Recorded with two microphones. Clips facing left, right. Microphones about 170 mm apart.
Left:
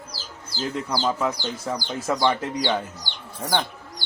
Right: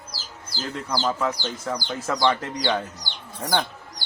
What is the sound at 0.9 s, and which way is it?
Speech, 10° left (ahead or behind).